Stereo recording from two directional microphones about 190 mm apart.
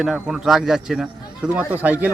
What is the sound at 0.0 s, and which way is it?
A man's voice, 5° right (ahead or behind).